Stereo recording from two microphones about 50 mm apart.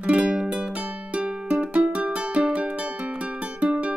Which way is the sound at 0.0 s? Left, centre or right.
Right.